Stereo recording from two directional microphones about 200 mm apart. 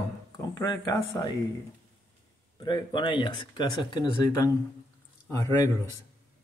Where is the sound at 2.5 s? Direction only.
25° left (ahead or behind).